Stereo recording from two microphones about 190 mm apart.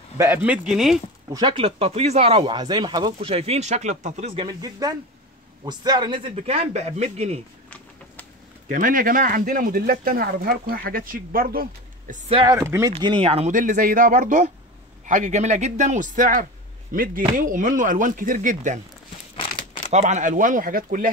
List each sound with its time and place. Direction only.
0.2 s speech: 10° right (ahead or behind)
1.3 s speech: 25° right (ahead or behind)
4.5 s speech: 20° right (ahead or behind); by 7.3 s 35° right (ahead or behind)
8.6 s speech: 45° right (ahead or behind)
12.3 s speech: 25° right (ahead or behind)
12.5 s speech: 15° right (ahead or behind)
12.9 s speech: 25° right (ahead or behind)
19.9 s speech: 40° right (ahead or behind)